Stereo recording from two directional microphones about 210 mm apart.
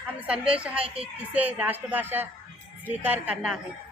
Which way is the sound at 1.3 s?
5° right (ahead or behind).